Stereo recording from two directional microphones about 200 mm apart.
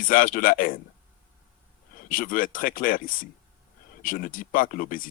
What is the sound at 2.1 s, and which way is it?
Speech, 45° left (ahead or behind).